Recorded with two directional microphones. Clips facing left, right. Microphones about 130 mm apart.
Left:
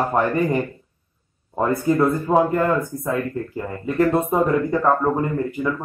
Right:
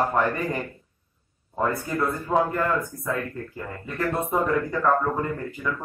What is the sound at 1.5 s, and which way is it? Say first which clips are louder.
Speech: left 7 dB; 30° left (ahead or behind).